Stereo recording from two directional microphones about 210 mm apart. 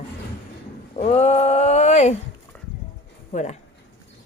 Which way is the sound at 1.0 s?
35° left (ahead or behind).